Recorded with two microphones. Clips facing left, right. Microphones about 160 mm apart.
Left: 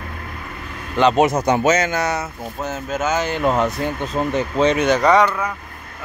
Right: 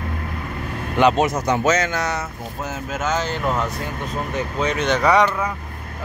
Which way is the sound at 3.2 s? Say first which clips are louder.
Left 4 dB; 15° left (ahead or behind).